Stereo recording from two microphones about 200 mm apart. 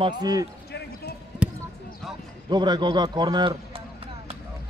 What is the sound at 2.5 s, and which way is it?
A man's voice, 20° right (ahead or behind).